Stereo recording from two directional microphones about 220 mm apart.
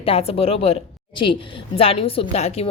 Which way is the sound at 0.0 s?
25° left (ahead or behind).